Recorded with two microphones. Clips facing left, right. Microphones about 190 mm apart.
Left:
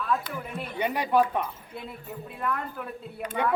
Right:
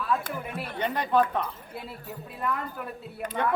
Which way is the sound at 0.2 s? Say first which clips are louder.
Right 1 dB; 55° right (ahead or behind).